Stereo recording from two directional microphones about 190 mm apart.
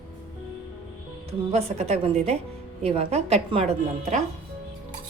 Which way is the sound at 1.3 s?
35° right (ahead or behind).